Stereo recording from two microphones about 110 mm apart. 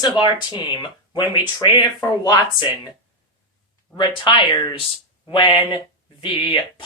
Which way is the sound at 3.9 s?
50° left (ahead or behind).